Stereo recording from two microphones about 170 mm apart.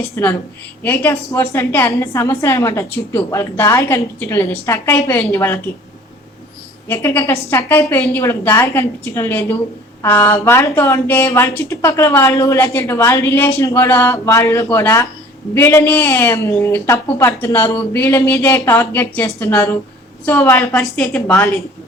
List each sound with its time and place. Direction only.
0.0 s a woman's voice: 10° left (ahead or behind)
6.8 s a woman's voice: 15° left (ahead or behind)